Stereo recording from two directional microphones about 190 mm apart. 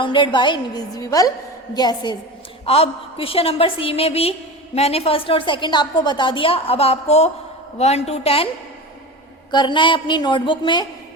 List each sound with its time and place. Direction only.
0.0 s a woman's voice: 25° left (ahead or behind)
9.5 s a woman's voice: 25° left (ahead or behind)